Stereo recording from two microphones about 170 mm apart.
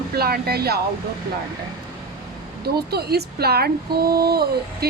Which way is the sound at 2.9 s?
70° right (ahead or behind).